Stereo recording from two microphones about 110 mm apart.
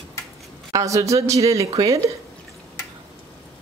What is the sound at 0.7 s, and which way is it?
Speech, 30° right (ahead or behind).